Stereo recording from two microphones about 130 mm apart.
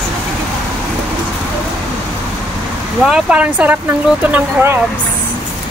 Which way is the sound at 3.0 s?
5° right (ahead or behind).